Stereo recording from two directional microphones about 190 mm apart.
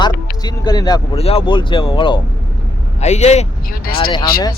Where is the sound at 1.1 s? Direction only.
30° left (ahead or behind).